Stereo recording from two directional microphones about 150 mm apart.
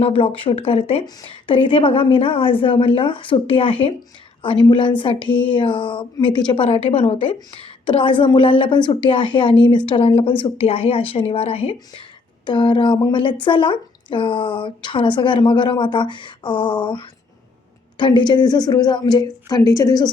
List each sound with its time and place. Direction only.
0.0 s speech: 40° left (ahead or behind)
1.0 s speech: 30° left (ahead or behind)
6.7 s speech: 40° left (ahead or behind); by 20.1 s 25° left (ahead or behind)